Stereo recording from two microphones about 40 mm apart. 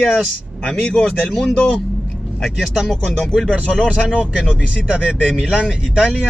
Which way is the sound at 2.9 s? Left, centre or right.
Centre.